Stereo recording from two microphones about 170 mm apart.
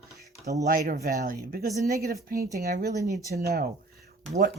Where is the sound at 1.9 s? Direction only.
65° right (ahead or behind).